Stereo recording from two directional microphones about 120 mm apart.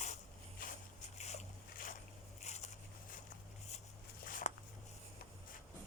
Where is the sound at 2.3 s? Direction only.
70° left (ahead or behind).